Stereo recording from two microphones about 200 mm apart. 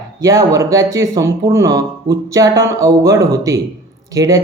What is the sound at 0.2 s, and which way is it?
Speech, 15° right (ahead or behind).